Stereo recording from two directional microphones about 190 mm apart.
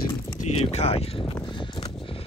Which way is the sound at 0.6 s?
30° left (ahead or behind).